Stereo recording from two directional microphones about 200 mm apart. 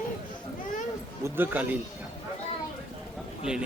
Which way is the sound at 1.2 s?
10° right (ahead or behind).